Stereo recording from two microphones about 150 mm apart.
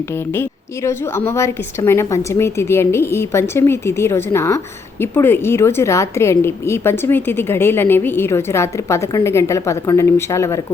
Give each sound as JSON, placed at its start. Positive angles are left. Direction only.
{"t": 0.3, "sound": "a woman's voice", "side_deg": 15}